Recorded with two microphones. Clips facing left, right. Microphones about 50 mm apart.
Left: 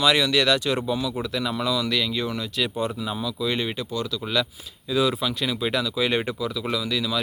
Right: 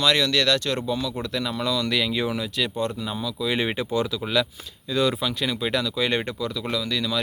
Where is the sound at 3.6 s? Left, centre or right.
Right.